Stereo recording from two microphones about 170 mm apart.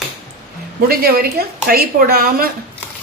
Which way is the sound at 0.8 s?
65° right (ahead or behind).